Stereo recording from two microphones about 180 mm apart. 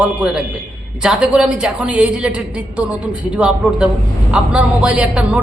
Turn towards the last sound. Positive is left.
turn(degrees=-5)  # may be behind; listen again after turning